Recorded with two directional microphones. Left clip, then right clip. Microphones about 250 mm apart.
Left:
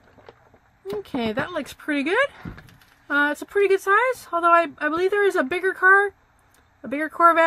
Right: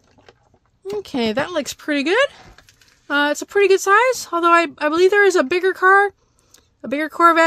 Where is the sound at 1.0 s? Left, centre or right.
Right.